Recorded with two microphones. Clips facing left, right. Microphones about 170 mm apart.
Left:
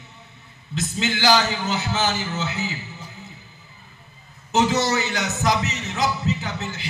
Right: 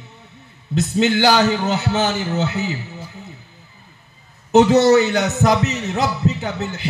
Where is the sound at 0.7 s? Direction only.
60° right (ahead or behind).